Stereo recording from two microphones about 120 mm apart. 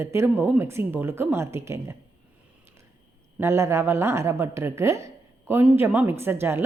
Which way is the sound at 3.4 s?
20° right (ahead or behind).